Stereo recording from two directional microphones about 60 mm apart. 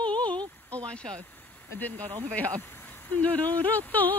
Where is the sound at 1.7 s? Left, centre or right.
Left.